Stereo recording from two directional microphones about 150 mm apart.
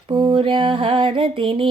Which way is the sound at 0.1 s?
35° right (ahead or behind).